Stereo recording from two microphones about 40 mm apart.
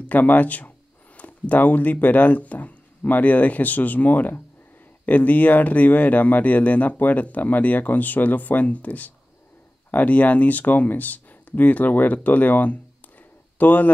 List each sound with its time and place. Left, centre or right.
0.0 s speech: left